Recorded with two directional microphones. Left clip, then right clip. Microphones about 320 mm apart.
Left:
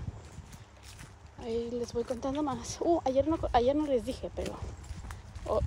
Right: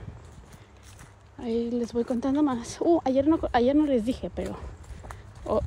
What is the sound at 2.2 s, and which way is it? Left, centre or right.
Speech, right.